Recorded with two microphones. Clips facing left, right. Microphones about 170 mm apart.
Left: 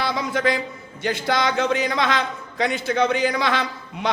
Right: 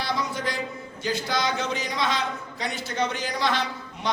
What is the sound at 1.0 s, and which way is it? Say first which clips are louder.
A man's voice: left 5 dB; 60° left (ahead or behind).